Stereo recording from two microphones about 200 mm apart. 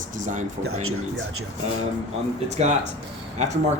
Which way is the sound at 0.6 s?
90° right.